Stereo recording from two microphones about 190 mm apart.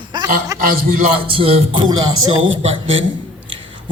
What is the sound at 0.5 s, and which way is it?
Speech, 15° right (ahead or behind).